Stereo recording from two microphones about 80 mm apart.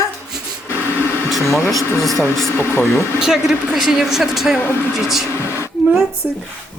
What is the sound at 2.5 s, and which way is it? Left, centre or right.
Speech, left.